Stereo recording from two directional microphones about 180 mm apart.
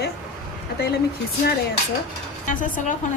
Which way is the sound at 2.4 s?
45° left (ahead or behind).